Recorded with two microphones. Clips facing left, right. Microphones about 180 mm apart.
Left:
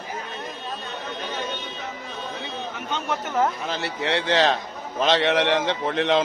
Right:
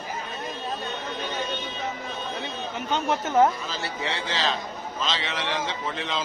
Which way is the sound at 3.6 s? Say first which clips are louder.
Left 4 dB; 65° left (ahead or behind).